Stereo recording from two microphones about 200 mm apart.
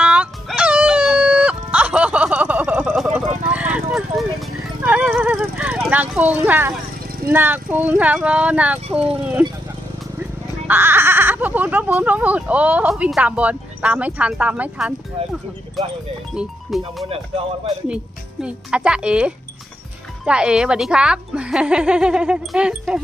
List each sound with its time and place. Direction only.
0.0 s dog: 5° right (ahead or behind)
7.3 s speech: 10° right (ahead or behind)
10.7 s speech: 10° right (ahead or behind)
15.2 s speech: 30° right (ahead or behind)
16.3 s speech: centre (ahead or behind)
18.4 s speech: 5° right (ahead or behind)